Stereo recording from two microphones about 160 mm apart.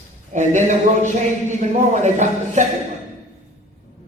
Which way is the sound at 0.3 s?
50° right (ahead or behind).